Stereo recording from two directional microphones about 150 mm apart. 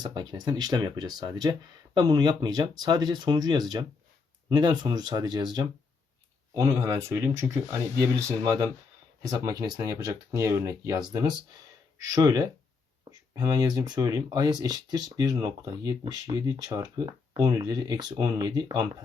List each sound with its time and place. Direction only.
0.0 s speech: 30° right (ahead or behind)